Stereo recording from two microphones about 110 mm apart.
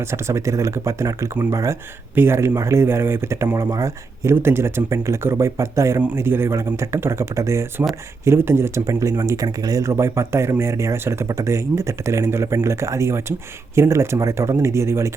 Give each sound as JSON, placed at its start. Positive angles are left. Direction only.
{"t": 0.1, "sound": "speech", "side_deg": -25}